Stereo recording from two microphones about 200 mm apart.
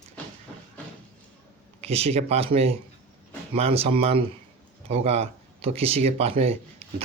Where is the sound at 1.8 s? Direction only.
30° right (ahead or behind).